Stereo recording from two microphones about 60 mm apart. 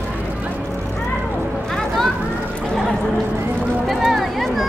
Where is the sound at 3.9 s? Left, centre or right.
Centre.